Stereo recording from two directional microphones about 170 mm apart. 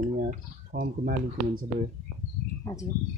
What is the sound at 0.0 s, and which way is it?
Speech, 55° right (ahead or behind).